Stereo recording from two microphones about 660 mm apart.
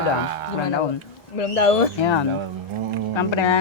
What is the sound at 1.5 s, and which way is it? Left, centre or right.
Speech, left.